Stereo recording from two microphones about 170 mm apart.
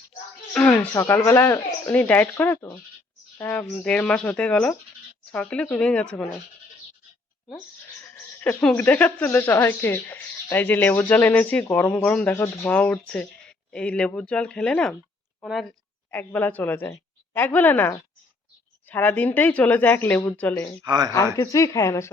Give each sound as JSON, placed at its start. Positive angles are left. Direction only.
{"t": 0.5, "sound": "a woman's voice", "side_deg": 5}
{"t": 8.0, "sound": "a woman's voice", "side_deg": 10}
{"t": 16.0, "sound": "a woman's voice", "side_deg": 10}
{"t": 20.8, "sound": "speech", "side_deg": -25}
{"t": 21.3, "sound": "speech", "side_deg": 20}